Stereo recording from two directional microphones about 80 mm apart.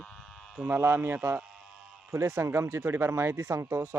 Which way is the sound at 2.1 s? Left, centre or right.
Right.